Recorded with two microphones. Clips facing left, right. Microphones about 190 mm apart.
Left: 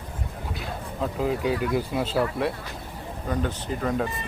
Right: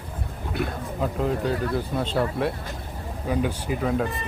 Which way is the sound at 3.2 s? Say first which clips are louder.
Right 3 dB; 10° right (ahead or behind).